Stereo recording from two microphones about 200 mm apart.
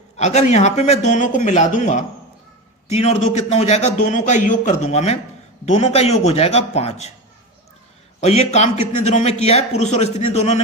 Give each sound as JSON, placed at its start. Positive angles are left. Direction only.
{"t": 0.2, "sound": "a man's voice", "side_deg": 35}
{"t": 8.2, "sound": "a man's voice", "side_deg": 35}